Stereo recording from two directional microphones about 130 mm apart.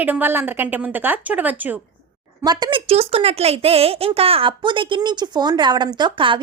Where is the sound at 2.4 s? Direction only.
30° right (ahead or behind).